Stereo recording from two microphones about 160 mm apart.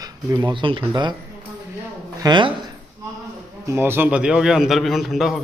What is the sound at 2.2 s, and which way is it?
Speech, 30° right (ahead or behind).